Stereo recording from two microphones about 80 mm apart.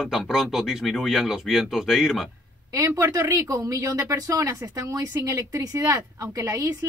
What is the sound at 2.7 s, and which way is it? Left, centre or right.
Speech, right.